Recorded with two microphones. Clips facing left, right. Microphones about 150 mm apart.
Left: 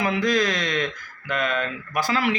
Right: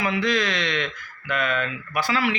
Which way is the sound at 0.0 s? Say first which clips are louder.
Left 2 dB; 45° left (ahead or behind).